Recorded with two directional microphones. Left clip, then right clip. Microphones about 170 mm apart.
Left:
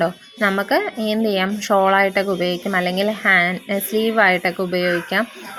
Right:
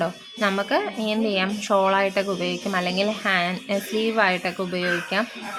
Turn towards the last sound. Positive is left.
turn(degrees=30)  # may be behind; listen again after turning